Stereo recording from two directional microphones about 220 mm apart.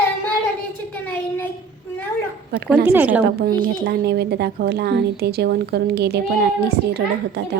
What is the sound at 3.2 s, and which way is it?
A woman's voice, 45° right (ahead or behind).